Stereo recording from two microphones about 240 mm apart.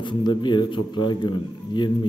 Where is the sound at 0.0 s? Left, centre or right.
Centre.